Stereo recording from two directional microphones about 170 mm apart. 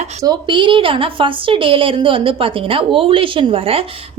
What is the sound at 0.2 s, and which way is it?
A woman's voice, 25° right (ahead or behind).